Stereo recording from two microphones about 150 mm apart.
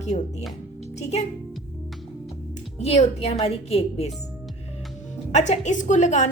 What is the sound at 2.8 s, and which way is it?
A woman's voice, 45° left (ahead or behind).